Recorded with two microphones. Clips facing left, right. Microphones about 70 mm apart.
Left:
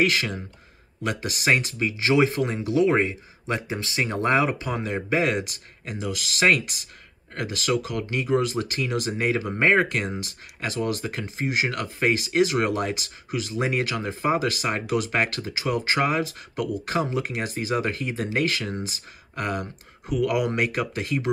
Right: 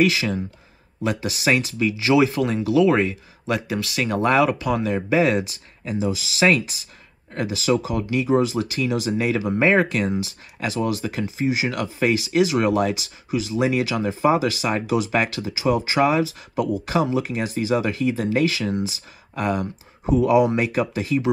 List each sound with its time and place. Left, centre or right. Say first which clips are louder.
0.0 s speech: right 3 dB; left